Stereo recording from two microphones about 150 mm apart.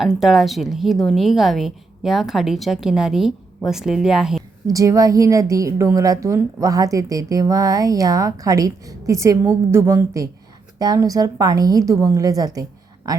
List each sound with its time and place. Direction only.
0.0 s a woman's voice: 5° right (ahead or behind)
4.6 s a woman's voice: 20° right (ahead or behind)